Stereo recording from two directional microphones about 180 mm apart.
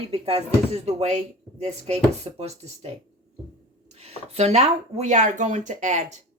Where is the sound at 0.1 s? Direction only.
35° right (ahead or behind).